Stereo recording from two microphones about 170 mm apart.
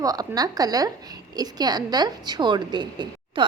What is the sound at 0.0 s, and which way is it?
A woman's voice, 20° right (ahead or behind).